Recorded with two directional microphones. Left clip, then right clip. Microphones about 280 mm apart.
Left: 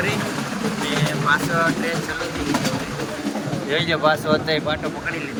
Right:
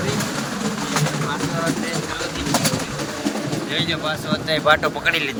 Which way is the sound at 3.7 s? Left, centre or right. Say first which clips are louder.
Left 6 dB; centre.